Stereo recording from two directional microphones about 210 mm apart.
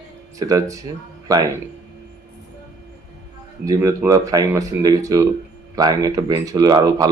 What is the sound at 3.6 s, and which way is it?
Speech, 15° right (ahead or behind).